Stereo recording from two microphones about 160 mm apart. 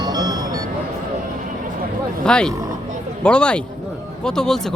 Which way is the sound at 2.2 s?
5° left (ahead or behind).